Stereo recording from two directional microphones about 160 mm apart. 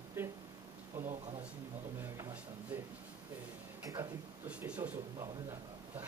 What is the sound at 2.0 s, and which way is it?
Speech, 15° right (ahead or behind).